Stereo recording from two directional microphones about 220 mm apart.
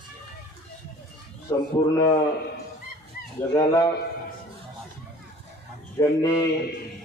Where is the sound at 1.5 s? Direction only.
20° left (ahead or behind).